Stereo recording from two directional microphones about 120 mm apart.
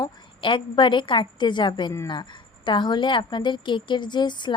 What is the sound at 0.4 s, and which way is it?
Speech, 45° left (ahead or behind).